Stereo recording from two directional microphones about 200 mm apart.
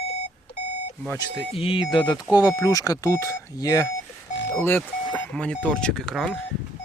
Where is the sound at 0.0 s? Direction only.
30° left (ahead or behind).